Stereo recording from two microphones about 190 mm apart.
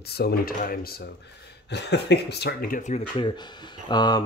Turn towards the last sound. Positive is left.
turn(degrees=20)  # may be behind; listen again after turning